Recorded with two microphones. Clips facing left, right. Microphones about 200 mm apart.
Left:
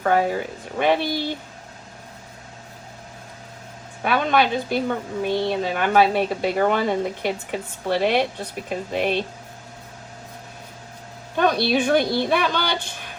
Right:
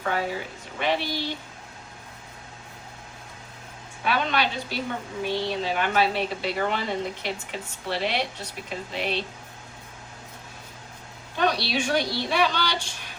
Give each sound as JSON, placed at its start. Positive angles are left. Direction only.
{"t": 0.0, "sound": "speech", "side_deg": 50}
{"t": 4.0, "sound": "speech", "side_deg": 50}
{"t": 11.3, "sound": "speech", "side_deg": 50}